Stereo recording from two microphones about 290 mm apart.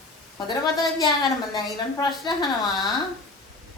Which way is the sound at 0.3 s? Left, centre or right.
Centre.